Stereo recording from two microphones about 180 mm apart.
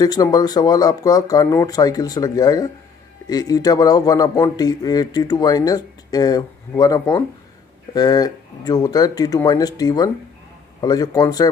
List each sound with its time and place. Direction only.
0.0 s a man's voice: 20° left (ahead or behind)